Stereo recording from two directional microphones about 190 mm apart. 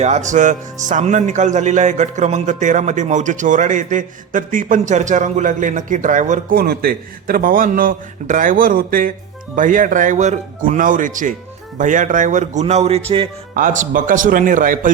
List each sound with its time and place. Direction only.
0.0 s speech: 40° right (ahead or behind)